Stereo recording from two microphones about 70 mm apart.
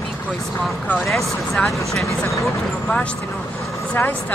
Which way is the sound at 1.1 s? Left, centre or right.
Centre.